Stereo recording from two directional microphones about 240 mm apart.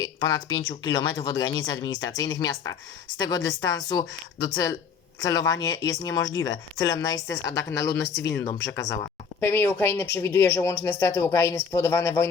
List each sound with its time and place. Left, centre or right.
0.0 s speech: centre